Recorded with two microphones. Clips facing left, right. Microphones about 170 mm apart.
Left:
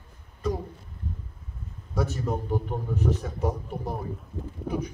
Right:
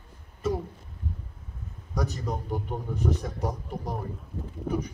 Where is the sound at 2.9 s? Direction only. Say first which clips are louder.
Left 1 dB; 15° right (ahead or behind).